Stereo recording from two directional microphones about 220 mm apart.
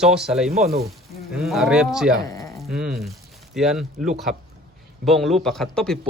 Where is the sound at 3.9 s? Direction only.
30° right (ahead or behind).